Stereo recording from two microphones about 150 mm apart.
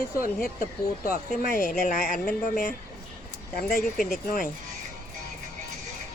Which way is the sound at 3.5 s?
80° left.